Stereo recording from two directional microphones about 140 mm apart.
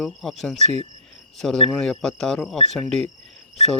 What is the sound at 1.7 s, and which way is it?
Speech, 5° left (ahead or behind).